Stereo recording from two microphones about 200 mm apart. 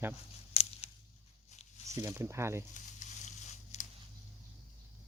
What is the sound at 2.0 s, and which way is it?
Speech, 10° right (ahead or behind).